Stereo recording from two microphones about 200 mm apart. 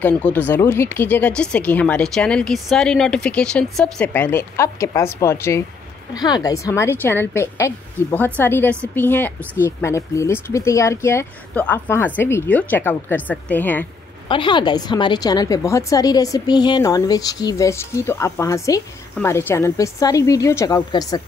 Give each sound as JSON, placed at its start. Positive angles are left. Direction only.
{"t": 0.0, "sound": "a woman's voice", "side_deg": 5}
{"t": 14.3, "sound": "a woman's voice", "side_deg": 25}